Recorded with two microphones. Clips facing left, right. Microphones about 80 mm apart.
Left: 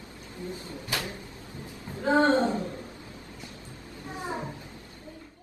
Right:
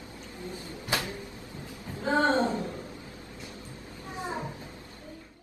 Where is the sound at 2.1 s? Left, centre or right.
Left.